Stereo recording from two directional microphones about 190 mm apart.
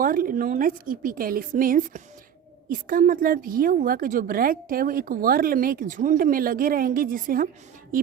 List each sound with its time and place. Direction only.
0.0 s a woman's voice: 45° right (ahead or behind)